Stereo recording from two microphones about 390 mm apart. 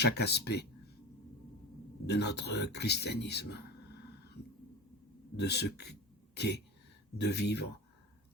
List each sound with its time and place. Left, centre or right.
0.0 s speech: left
2.0 s speech: left
5.4 s a man's voice: left